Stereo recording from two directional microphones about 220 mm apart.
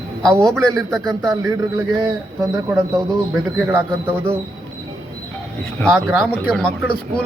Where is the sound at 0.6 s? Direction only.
15° right (ahead or behind).